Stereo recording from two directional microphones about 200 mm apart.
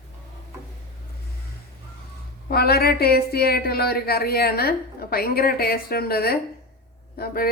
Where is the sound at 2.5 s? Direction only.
50° left (ahead or behind).